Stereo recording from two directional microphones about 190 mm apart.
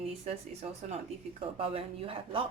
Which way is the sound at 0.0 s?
35° right (ahead or behind).